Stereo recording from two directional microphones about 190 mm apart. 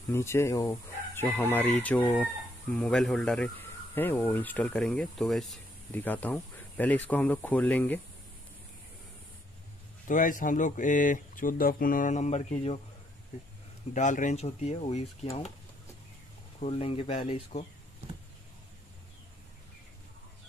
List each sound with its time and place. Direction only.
0.1 s speech: 15° left (ahead or behind)
10.0 s speech: 45° left (ahead or behind)
13.9 s speech: 40° left (ahead or behind)
16.5 s speech: 30° left (ahead or behind)